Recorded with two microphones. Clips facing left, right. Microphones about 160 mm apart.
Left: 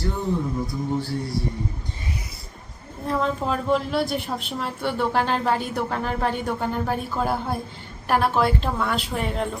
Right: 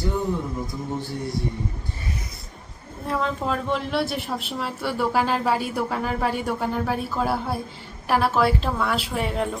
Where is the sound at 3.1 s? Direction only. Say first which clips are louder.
Left 1 dB; centre (ahead or behind).